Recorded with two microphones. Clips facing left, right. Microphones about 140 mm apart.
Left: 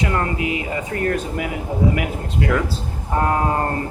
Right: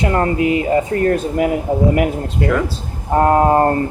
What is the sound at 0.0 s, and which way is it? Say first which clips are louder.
Speech: right 6 dB; 35° right (ahead or behind).